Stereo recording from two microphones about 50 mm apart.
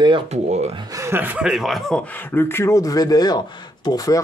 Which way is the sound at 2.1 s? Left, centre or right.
Left.